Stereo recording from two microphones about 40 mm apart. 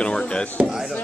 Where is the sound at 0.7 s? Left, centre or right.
Centre.